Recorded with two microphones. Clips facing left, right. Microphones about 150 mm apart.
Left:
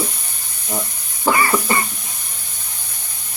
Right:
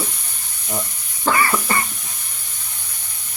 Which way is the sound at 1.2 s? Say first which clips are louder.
Left 2 dB; 15° left (ahead or behind).